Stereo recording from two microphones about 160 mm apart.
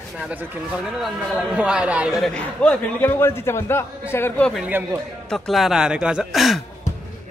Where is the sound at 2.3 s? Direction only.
10° left (ahead or behind).